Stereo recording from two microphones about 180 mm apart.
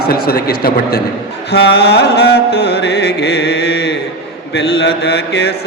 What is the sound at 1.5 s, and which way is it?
Music, 70° left (ahead or behind).